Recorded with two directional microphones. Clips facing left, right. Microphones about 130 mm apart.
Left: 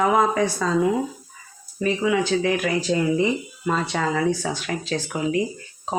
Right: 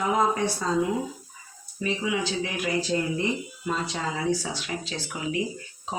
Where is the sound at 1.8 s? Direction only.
60° left (ahead or behind).